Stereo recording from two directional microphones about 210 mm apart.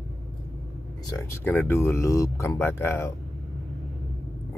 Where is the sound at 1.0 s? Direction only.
10° left (ahead or behind).